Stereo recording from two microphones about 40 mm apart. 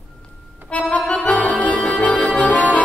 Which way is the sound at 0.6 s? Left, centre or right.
Left.